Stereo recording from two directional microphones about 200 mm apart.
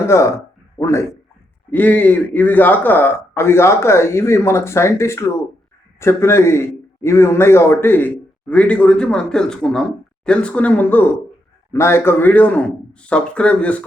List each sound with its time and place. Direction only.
0.0 s a man's voice: 15° left (ahead or behind)